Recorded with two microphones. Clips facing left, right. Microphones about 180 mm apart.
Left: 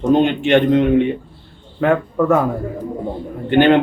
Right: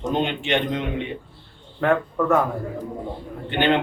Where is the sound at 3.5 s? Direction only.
50° left (ahead or behind).